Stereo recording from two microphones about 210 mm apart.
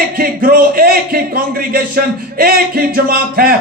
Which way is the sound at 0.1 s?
40° right (ahead or behind).